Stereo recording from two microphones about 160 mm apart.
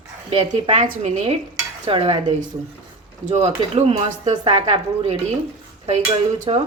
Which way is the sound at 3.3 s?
40° right (ahead or behind).